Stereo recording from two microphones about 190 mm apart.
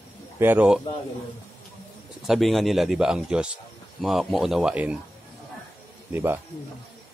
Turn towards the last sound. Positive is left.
turn(degrees=-10)  # may be behind; listen again after turning